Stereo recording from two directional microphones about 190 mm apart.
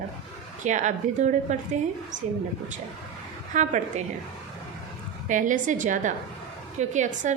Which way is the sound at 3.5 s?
40° right (ahead or behind).